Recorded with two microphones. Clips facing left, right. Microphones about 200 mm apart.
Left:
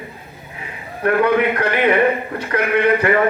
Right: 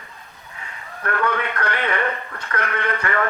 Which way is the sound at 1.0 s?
20° left (ahead or behind).